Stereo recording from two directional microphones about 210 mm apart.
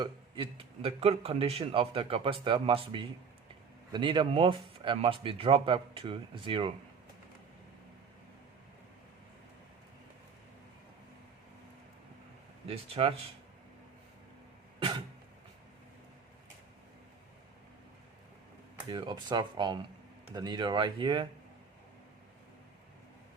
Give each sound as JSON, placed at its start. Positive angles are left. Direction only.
{"t": 0.0, "sound": "speech", "side_deg": -25}
{"t": 3.9, "sound": "speech", "side_deg": -20}
{"t": 12.6, "sound": "speech", "side_deg": -30}
{"t": 14.8, "sound": "cough", "side_deg": -25}
{"t": 18.9, "sound": "speech", "side_deg": -20}